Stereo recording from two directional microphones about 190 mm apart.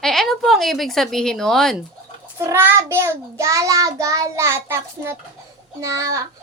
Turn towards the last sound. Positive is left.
turn(degrees=-15)  # may be behind; listen again after turning